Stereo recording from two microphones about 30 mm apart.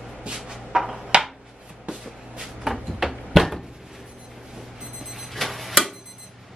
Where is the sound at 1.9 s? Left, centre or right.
Right.